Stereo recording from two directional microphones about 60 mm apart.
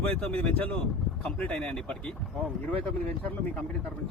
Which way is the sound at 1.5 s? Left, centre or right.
Centre.